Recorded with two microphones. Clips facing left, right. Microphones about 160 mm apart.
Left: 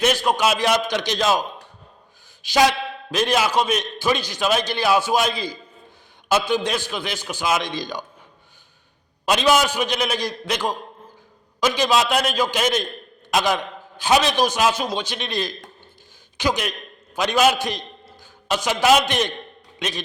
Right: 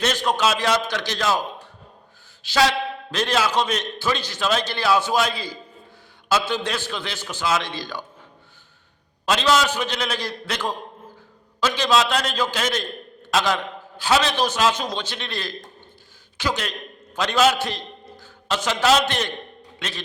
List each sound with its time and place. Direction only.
0.0 s a man's voice: 10° left (ahead or behind)
9.2 s a man's voice: 15° left (ahead or behind)